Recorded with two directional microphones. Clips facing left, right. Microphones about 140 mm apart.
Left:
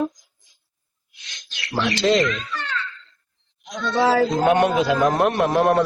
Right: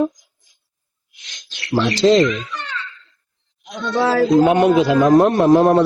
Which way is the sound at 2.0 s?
30° right (ahead or behind).